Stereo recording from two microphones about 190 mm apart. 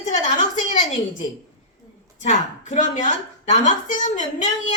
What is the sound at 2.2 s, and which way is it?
A woman's voice, 40° left (ahead or behind).